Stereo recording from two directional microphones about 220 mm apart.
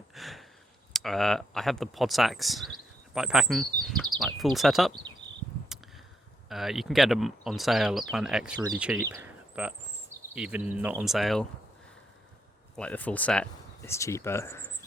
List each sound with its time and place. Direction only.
0.1 s sigh: centre (ahead or behind)
0.9 s speech: centre (ahead or behind)
6.5 s speech: centre (ahead or behind)
12.7 s speech: 5° left (ahead or behind)